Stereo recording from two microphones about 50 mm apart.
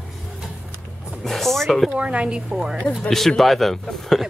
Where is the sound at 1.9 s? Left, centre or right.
Right.